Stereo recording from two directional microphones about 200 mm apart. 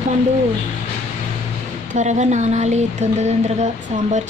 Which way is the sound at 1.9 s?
35° right (ahead or behind).